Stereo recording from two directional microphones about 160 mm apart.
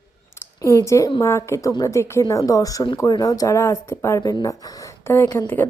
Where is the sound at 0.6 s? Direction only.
20° left (ahead or behind).